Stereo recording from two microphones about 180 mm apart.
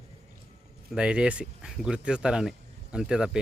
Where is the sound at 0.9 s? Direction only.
5° right (ahead or behind).